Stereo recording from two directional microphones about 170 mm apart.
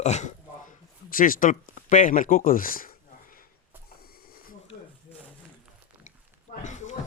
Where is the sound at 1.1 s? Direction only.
55° left (ahead or behind).